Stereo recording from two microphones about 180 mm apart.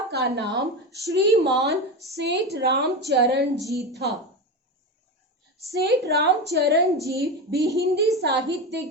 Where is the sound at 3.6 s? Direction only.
20° right (ahead or behind).